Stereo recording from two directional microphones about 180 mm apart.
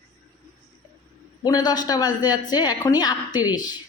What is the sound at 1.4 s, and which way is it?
A woman's voice, 20° left (ahead or behind).